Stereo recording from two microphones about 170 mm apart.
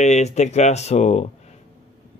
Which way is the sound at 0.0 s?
40° left (ahead or behind).